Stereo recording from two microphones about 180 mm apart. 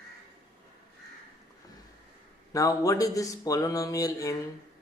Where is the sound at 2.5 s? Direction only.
20° left (ahead or behind).